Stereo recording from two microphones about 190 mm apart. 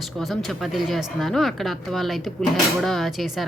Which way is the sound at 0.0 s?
Centre (ahead or behind).